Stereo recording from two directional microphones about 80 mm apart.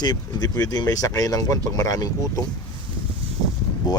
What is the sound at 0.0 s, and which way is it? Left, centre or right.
Speech, left.